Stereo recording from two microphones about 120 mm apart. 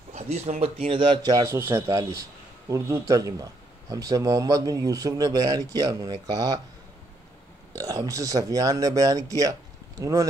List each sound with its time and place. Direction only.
0.1 s a man's voice: 65° right (ahead or behind); by 1.5 s 35° right (ahead or behind)
1.5 s speech: 20° right (ahead or behind)
7.7 s speech: 30° right (ahead or behind)